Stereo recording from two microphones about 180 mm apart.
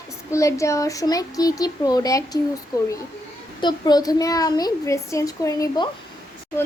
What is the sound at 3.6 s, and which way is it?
A woman's voice, 25° left (ahead or behind).